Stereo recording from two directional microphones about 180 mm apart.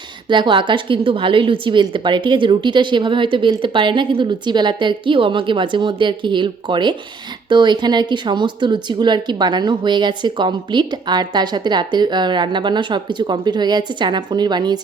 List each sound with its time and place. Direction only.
0.3 s speech: 25° right (ahead or behind)